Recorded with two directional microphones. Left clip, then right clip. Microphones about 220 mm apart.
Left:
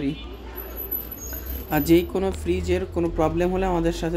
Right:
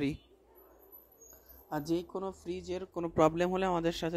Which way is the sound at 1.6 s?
20° right (ahead or behind).